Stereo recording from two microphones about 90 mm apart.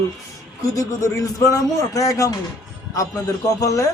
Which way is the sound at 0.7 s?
40° left (ahead or behind).